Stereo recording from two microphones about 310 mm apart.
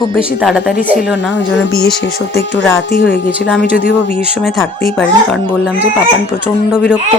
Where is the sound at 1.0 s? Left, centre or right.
Left.